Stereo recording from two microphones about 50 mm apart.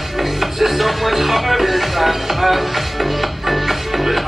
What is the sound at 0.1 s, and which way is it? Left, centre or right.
Music, centre.